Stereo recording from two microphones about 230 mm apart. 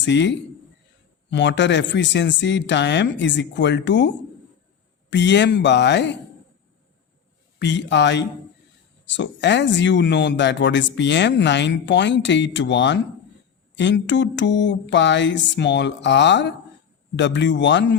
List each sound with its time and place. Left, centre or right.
0.0 s speech: left
5.1 s speech: left
7.6 s speech: left